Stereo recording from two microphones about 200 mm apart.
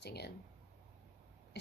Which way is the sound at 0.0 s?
55° left (ahead or behind).